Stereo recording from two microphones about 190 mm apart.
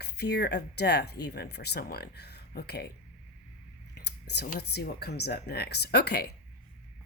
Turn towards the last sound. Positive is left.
turn(degrees=60)  # may be behind; listen again after turning